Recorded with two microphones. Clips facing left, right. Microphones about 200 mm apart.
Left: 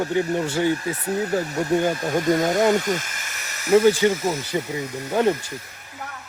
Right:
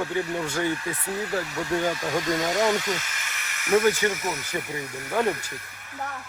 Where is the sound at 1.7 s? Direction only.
25° left (ahead or behind).